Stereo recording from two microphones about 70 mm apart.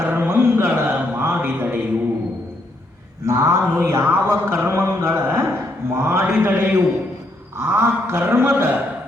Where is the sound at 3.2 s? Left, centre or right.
Right.